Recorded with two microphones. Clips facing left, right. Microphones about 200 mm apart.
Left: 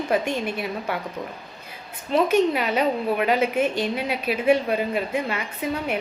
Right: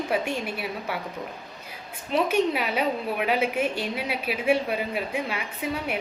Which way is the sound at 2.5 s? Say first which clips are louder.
Left 4 dB; 5° right (ahead or behind).